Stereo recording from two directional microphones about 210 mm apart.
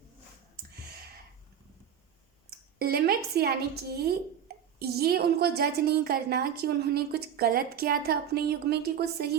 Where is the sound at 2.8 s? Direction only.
45° right (ahead or behind).